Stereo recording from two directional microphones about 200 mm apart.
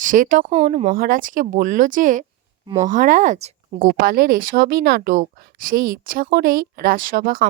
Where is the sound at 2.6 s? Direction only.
20° right (ahead or behind).